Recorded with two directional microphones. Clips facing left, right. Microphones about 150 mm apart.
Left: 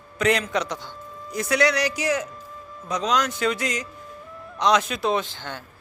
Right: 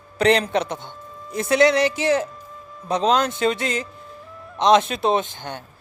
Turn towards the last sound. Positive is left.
turn(degrees=-20)  # may be behind; listen again after turning